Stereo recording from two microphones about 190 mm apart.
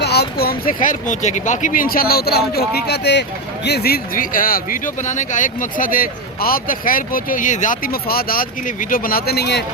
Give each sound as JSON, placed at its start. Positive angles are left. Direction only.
{"t": 0.0, "sound": "speech", "side_deg": 60}